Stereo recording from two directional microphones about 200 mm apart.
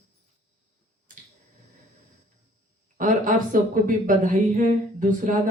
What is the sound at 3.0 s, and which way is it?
A woman's voice, 40° right (ahead or behind).